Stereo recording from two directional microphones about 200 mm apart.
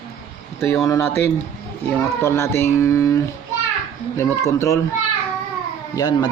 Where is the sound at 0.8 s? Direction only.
15° left (ahead or behind).